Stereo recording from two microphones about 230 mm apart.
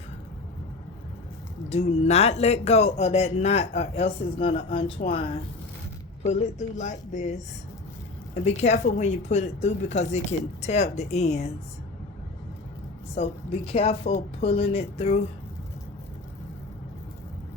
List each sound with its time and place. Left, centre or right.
1.7 s speech: left
8.4 s speech: left
13.1 s speech: left